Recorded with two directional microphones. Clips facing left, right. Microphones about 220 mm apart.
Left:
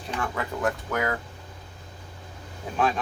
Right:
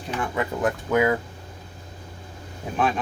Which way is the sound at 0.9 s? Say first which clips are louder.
Right 7 dB; 15° right (ahead or behind).